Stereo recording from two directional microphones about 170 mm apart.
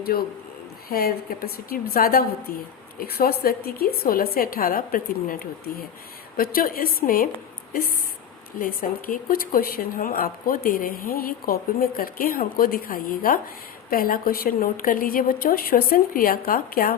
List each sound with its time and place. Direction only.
0.1 s a woman's voice: 60° left (ahead or behind)